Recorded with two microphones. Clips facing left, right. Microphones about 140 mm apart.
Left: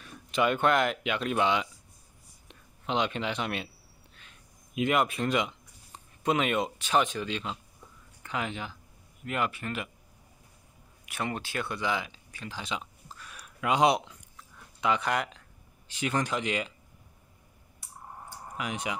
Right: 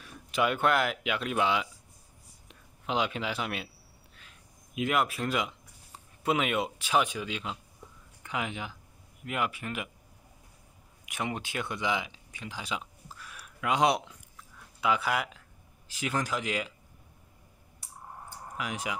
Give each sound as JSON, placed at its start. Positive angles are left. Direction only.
{"t": 0.0, "sound": "speech", "side_deg": -5}
{"t": 4.2, "sound": "a sound", "side_deg": 0}
{"t": 6.2, "sound": "speech", "side_deg": -5}
{"t": 11.1, "sound": "speech", "side_deg": -15}
{"t": 18.6, "sound": "speech", "side_deg": 0}